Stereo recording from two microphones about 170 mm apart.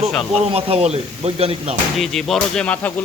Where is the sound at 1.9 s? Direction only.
Centre (ahead or behind).